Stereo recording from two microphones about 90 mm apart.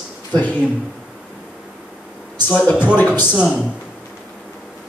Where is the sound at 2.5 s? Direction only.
20° left (ahead or behind).